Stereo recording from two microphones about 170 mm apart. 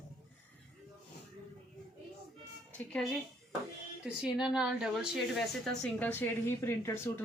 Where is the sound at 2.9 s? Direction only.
5° left (ahead or behind).